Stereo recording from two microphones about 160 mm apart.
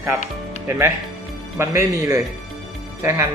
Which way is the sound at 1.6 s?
15° right (ahead or behind).